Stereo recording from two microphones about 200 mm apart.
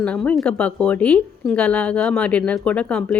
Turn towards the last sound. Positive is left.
turn(degrees=5)  # may be behind; listen again after turning